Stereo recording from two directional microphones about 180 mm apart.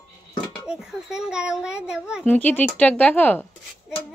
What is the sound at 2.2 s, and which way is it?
Speech, 10° left (ahead or behind).